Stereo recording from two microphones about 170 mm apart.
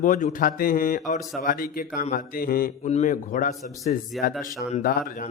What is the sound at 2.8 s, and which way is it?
A man's voice, 45° left (ahead or behind).